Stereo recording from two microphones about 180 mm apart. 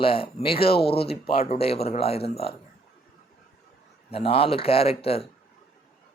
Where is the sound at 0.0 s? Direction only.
30° left (ahead or behind).